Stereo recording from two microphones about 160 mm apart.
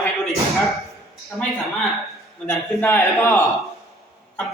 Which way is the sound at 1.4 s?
Centre (ahead or behind).